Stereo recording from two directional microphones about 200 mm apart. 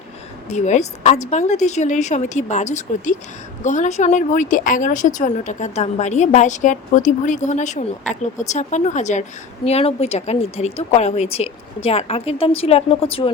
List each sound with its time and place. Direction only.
0.4 s a woman's voice: 35° left (ahead or behind)